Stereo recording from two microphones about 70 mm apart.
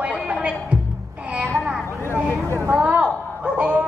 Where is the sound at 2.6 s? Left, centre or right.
Centre.